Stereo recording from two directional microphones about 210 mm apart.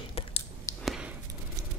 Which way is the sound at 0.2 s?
30° left (ahead or behind).